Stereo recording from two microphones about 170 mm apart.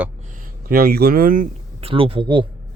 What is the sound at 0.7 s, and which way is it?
Speech, 60° right (ahead or behind).